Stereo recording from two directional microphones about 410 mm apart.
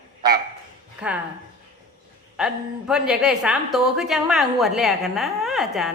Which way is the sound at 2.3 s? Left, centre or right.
Centre.